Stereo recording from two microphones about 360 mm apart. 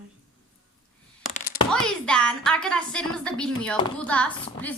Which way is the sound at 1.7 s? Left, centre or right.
Centre.